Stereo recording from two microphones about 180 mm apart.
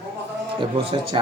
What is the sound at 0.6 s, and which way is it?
Speech, 30° right (ahead or behind).